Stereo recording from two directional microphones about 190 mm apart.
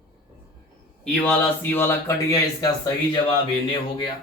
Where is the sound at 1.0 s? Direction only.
5° left (ahead or behind).